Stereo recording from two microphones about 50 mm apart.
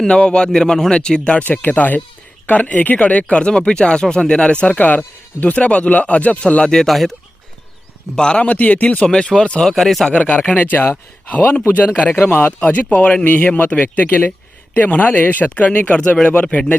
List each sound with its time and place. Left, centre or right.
0.1 s speech: centre
1.5 s speech: left
3.5 s speech: centre
6.8 s speech: centre
8.1 s speech: centre
8.4 s speech: left
9.0 s speech: centre
10.1 s speech: left
11.3 s speech: left